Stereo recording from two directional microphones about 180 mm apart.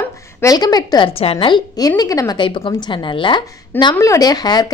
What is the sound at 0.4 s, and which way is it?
A woman's voice, 20° left (ahead or behind).